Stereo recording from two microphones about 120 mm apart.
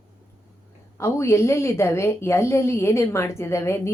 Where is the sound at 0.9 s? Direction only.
25° left (ahead or behind).